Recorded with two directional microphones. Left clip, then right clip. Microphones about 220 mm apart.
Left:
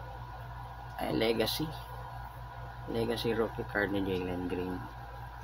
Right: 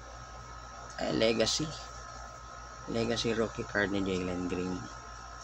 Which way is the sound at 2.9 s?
5° right (ahead or behind).